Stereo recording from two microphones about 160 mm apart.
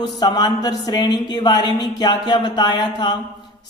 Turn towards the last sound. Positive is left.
turn(degrees=25)  # may be behind; listen again after turning